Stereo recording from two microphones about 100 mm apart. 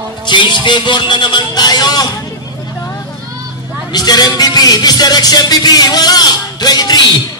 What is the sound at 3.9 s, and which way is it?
Music, 40° left (ahead or behind).